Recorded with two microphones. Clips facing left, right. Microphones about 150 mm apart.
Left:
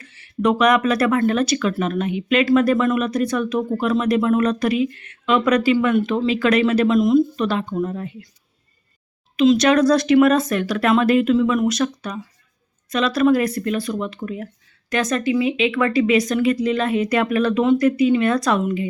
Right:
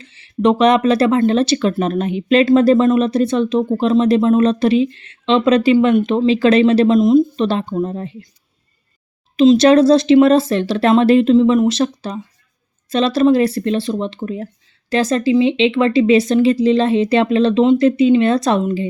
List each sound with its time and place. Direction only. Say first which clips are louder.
0.0 s speech: right 5 dB; 25° right (ahead or behind)
9.3 s speech: right 5 dB; 30° right (ahead or behind)